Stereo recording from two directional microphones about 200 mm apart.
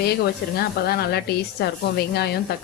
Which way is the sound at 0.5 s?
50° left (ahead or behind).